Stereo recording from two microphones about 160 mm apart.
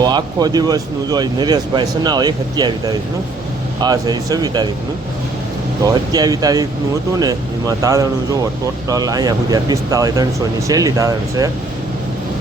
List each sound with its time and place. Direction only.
0.0 s speech: 25° right (ahead or behind)
5.8 s speech: 25° right (ahead or behind)